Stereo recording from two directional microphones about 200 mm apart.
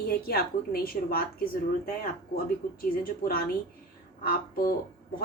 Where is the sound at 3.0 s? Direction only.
50° left (ahead or behind).